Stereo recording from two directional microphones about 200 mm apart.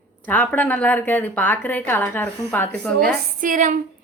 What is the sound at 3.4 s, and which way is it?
Speech, 40° right (ahead or behind).